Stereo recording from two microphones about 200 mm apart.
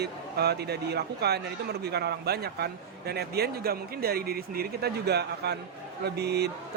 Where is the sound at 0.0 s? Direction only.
55° right (ahead or behind).